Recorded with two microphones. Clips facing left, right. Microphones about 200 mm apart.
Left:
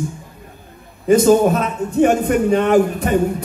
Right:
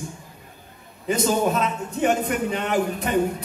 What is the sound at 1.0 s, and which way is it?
A man's voice, 50° left (ahead or behind).